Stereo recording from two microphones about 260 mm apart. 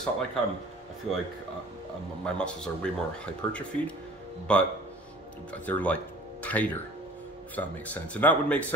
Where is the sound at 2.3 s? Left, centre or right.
Centre.